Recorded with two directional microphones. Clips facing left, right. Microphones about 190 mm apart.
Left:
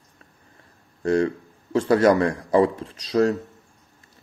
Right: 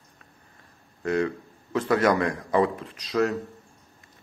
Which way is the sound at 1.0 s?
30° left (ahead or behind).